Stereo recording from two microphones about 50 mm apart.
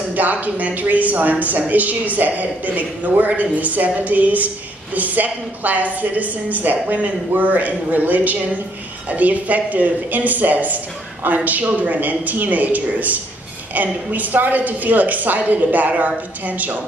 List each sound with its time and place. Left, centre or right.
0.1 s speech: right